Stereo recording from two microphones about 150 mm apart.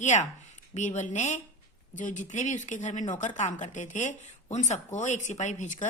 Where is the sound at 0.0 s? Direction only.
50° left (ahead or behind).